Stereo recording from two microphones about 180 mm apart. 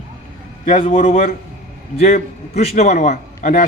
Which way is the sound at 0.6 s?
50° left (ahead or behind).